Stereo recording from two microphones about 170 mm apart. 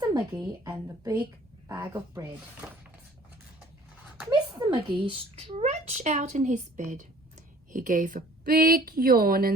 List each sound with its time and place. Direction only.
0.0 s a woman's voice: 20° right (ahead or behind)
4.3 s a child's voice: 25° right (ahead or behind); by 9.5 s 60° right (ahead or behind)